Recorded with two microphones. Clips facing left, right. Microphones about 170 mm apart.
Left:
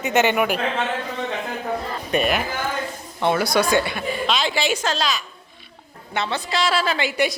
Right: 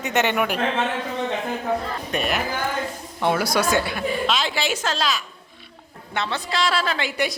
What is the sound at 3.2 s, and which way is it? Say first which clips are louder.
A woman's voice: left 1 dB; 5° right (ahead or behind).